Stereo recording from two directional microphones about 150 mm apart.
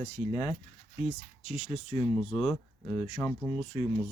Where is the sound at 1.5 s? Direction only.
35° left (ahead or behind).